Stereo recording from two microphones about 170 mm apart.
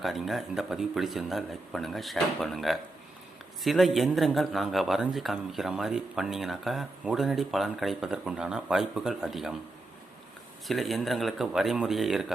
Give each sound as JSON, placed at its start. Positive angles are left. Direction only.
{"t": 0.0, "sound": "a man's voice", "side_deg": 0}
{"t": 10.7, "sound": "a man's voice", "side_deg": 0}